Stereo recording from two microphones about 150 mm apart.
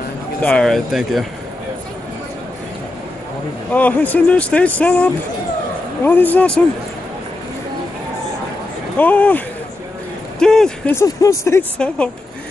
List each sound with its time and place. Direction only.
0.4 s speech: 5° left (ahead or behind)
3.7 s speech: 10° left (ahead or behind)
8.9 s speech: 10° left (ahead or behind)
10.4 s speech: 5° left (ahead or behind)
11.0 s speech: 20° left (ahead or behind)
11.8 s speech: 5° left (ahead or behind)